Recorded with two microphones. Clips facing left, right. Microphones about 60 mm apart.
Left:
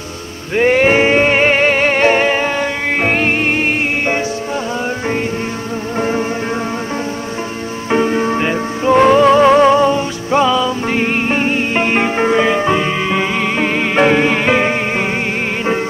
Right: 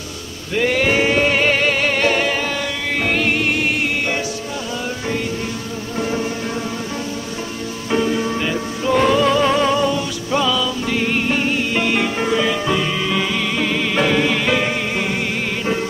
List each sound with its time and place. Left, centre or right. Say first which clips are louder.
0.6 s music: left 6 dB; left
5.9 s music: left 4 dB; left
7.9 s music: left 5 dB; left